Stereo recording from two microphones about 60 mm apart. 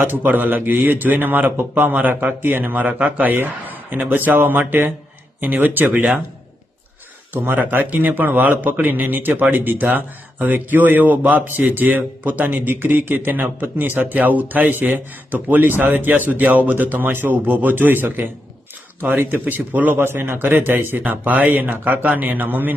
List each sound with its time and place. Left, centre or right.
0.0 s a man's voice: right
3.3 s a man's voice: right
7.5 s a man's voice: right